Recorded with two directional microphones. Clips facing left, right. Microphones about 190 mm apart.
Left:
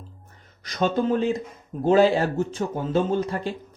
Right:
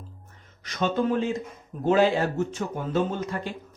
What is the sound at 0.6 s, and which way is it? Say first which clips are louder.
Speech: left 2 dB; 35° left (ahead or behind).